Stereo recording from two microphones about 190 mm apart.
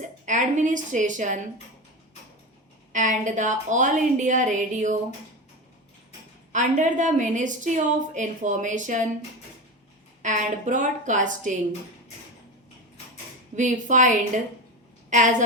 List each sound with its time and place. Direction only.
0.0 s a woman's voice: 40° right (ahead or behind)
2.9 s a woman's voice: 40° right (ahead or behind)
6.5 s a woman's voice: 40° right (ahead or behind)
10.2 s a woman's voice: 40° right (ahead or behind)
13.6 s a woman's voice: 40° right (ahead or behind)
15.1 s a woman's voice: 40° right (ahead or behind)